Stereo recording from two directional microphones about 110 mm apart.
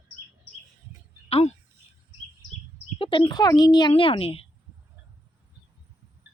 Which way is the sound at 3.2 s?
35° left (ahead or behind).